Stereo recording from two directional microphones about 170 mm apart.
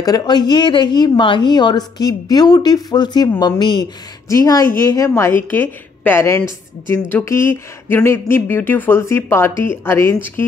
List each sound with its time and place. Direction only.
0.0 s a woman's voice: 25° left (ahead or behind)